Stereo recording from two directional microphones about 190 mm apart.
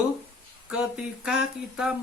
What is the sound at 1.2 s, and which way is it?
Speech, 5° right (ahead or behind).